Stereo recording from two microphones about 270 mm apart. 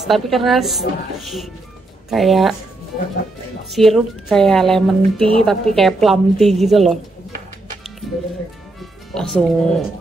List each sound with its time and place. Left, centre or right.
0.0 s speech: centre
3.7 s speech: centre
9.1 s speech: centre